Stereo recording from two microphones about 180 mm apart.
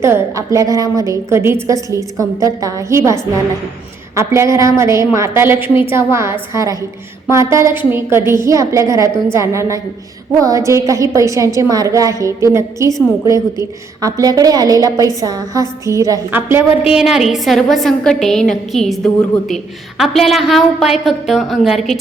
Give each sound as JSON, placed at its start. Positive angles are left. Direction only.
{"t": 0.0, "sound": "a woman's voice", "side_deg": -15}
{"t": 16.9, "sound": "a woman's voice", "side_deg": 0}